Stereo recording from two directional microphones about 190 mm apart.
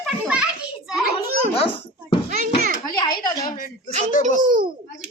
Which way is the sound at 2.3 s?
40° right (ahead or behind).